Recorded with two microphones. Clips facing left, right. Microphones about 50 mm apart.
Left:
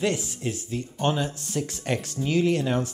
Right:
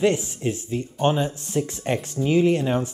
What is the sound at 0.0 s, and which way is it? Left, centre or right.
Speech, right.